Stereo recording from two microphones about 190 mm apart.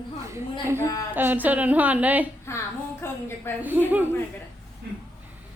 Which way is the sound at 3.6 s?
10° right (ahead or behind).